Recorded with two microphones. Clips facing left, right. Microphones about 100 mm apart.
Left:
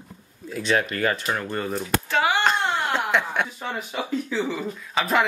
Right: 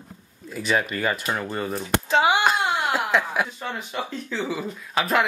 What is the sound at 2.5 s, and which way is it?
Speech, 5° right (ahead or behind).